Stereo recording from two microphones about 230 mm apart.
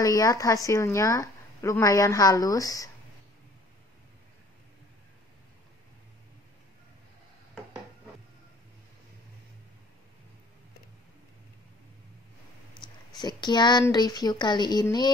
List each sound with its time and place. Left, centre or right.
0.0 s a woman's voice: centre
12.8 s a woman's voice: centre